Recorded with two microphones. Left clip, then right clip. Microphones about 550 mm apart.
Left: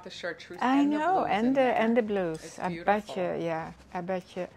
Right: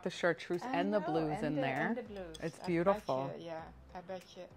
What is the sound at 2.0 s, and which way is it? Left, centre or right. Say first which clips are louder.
A woman's voice: left 16 dB; left.